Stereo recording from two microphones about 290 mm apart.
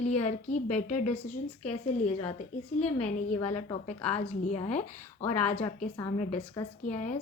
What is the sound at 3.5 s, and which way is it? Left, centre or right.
Speech, left.